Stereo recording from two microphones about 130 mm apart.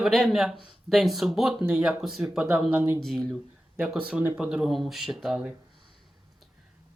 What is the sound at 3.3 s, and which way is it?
Speech, 10° right (ahead or behind).